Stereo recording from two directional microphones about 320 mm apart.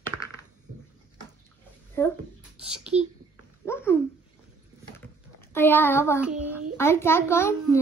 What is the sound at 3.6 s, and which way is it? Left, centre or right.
Speech, centre.